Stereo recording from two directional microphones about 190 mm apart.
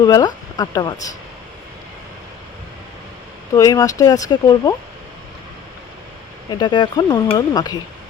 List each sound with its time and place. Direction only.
0.0 s speech: 20° left (ahead or behind)
3.5 s speech: 15° left (ahead or behind)
6.5 s speech: 25° left (ahead or behind)